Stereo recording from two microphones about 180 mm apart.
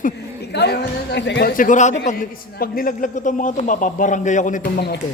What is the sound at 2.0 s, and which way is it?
A man's voice, 55° left (ahead or behind).